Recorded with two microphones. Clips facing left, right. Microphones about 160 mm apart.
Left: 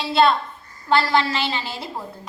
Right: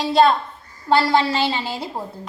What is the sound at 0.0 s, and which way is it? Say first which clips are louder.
A woman's voice: right 2 dB; 40° right (ahead or behind).